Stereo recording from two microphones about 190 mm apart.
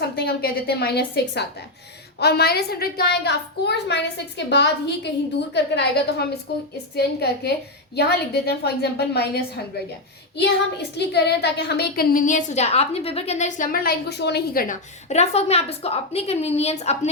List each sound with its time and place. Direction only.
0.2 s a woman's voice: 55° left (ahead or behind)
15.1 s a woman's voice: 35° left (ahead or behind)